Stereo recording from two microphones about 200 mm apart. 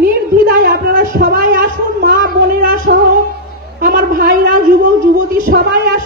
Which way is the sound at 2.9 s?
50° right (ahead or behind).